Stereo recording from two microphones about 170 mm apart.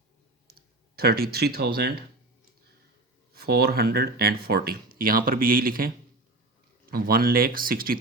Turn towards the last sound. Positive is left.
turn(degrees=-60)  # may be behind; listen again after turning